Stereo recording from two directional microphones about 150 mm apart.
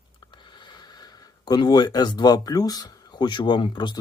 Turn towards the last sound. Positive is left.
turn(degrees=30)  # may be behind; listen again after turning